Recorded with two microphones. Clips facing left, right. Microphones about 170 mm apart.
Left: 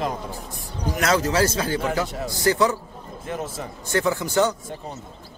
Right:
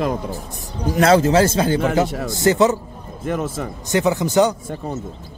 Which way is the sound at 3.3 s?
60° right (ahead or behind).